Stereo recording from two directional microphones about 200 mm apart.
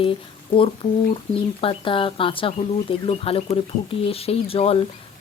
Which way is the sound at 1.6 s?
25° left (ahead or behind).